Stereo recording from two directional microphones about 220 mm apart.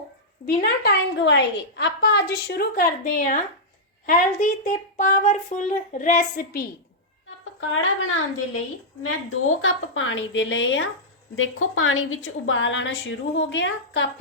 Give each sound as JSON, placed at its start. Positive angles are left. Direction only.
{"t": 0.4, "sound": "a woman's voice", "side_deg": 50}
{"t": 7.6, "sound": "a woman's voice", "side_deg": 65}